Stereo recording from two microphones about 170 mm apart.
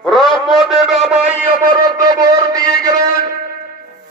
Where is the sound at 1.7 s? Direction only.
20° right (ahead or behind).